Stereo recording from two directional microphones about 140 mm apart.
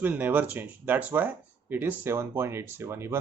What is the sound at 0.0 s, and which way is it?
Speech, 15° right (ahead or behind).